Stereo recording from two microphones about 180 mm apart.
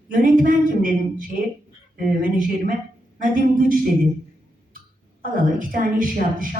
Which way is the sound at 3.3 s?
50° right (ahead or behind).